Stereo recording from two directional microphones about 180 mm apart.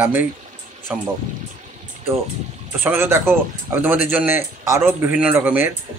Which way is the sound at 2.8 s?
10° right (ahead or behind).